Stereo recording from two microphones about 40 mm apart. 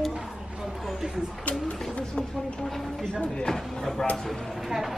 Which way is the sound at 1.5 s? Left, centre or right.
Left.